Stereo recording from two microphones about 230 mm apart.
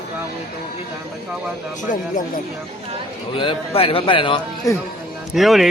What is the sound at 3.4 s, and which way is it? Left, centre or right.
A man's voice, left.